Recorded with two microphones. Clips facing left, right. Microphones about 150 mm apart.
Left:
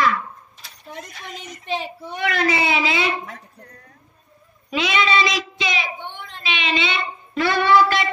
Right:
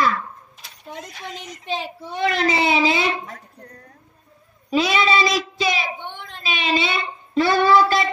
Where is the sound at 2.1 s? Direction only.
25° right (ahead or behind).